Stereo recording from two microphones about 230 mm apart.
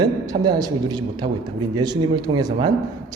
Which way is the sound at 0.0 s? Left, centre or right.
Centre.